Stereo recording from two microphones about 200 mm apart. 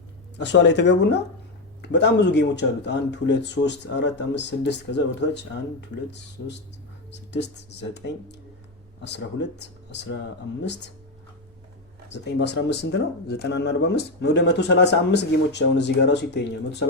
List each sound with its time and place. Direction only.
0.3 s speech: 60° left (ahead or behind)
12.1 s speech: 60° left (ahead or behind)